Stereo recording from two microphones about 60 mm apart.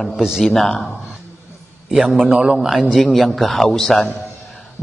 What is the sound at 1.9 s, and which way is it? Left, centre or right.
A man's voice, centre.